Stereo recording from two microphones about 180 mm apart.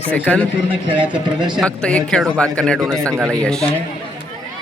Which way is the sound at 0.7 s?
30° right (ahead or behind).